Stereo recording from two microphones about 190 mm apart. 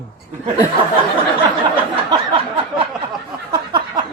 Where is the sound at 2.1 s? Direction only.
20° right (ahead or behind).